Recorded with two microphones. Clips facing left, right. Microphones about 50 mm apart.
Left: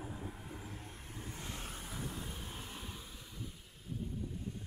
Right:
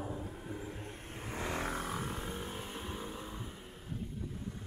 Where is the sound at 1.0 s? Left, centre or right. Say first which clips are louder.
Right 9 dB; right.